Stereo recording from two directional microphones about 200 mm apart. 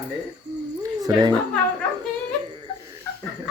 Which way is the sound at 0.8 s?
20° right (ahead or behind).